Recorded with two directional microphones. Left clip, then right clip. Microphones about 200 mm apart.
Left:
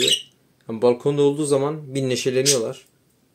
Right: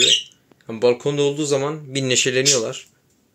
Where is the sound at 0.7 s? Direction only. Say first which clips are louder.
Right 1 dB; 15° left (ahead or behind).